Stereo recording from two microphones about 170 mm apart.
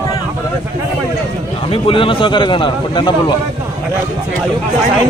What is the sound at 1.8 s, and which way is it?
A man's voice, 30° left (ahead or behind).